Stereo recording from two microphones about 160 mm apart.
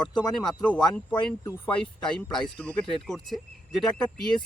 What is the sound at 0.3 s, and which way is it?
Speech, 5° left (ahead or behind).